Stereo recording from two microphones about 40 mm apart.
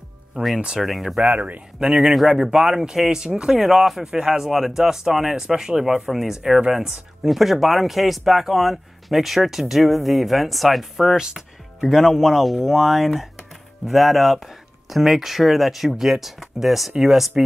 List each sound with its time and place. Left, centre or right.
0.3 s speech: right
0.7 s speech: centre
1.2 s speech: right
1.8 s speech: centre
2.1 s speech: centre; by 3.5 s right
3.5 s speech: centre
4.0 s speech: centre
11.1 s speech: centre